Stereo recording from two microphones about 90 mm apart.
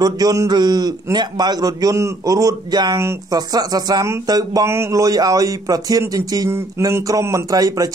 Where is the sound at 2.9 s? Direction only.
30° right (ahead or behind).